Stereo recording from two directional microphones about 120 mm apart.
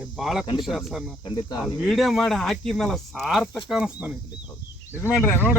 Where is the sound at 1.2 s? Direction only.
35° left (ahead or behind).